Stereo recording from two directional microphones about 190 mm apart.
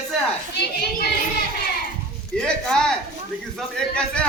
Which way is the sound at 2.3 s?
5° left (ahead or behind).